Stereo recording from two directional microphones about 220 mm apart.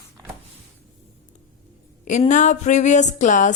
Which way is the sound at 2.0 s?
35° left (ahead or behind).